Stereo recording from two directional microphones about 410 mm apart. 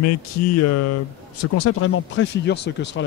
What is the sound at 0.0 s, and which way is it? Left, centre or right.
Speech, left.